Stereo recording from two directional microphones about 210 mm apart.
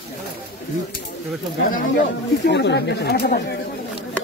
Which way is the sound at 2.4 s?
55° left (ahead or behind).